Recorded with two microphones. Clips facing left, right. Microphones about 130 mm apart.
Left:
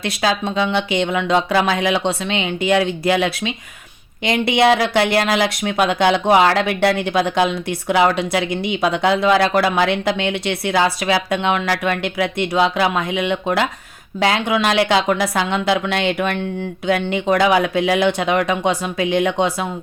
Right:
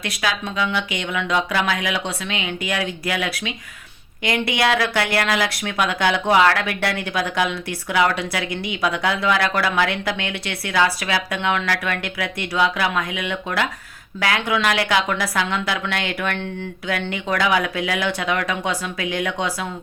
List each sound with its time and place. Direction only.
0.0 s speech: 30° left (ahead or behind)